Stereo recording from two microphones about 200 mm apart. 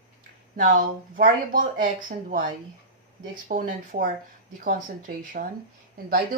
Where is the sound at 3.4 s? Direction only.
40° right (ahead or behind).